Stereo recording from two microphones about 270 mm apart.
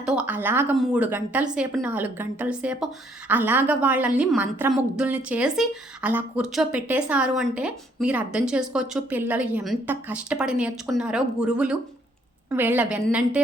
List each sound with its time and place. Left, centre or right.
0.0 s a woman's voice: centre